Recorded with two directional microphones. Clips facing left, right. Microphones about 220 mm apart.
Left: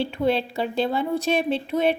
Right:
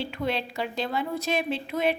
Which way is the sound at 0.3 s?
30° left (ahead or behind).